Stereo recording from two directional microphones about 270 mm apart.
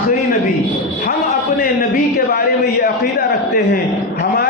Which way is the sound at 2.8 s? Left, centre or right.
Left.